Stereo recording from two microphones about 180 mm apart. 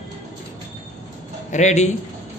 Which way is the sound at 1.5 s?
40° left (ahead or behind).